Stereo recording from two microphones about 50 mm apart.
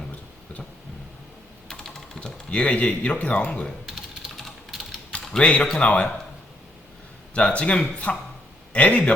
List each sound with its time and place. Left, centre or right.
1.6 s typing: centre
2.5 s a man's voice: left
3.8 s typing: centre
5.4 s a man's voice: left
7.3 s a man's voice: left